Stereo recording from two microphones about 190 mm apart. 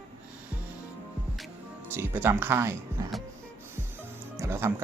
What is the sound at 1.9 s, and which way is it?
Speech, 10° right (ahead or behind).